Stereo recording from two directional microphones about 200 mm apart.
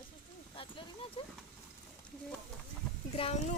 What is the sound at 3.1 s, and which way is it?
Speech, 30° left (ahead or behind).